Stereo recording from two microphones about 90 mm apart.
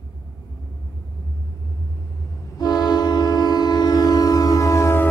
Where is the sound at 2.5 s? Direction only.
50° left (ahead or behind).